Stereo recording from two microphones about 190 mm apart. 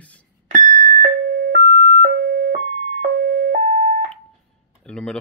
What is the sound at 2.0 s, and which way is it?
Siren, 50° right (ahead or behind).